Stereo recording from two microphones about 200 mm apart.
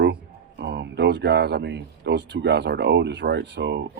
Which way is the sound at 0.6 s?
55° right (ahead or behind).